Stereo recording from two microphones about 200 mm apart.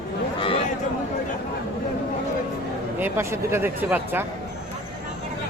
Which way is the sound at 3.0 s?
10° right (ahead or behind).